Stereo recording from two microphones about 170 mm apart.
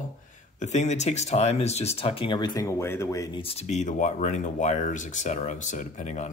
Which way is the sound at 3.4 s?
35° left (ahead or behind).